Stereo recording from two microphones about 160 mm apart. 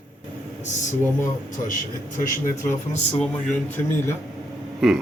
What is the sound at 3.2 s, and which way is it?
Speech, 10° left (ahead or behind).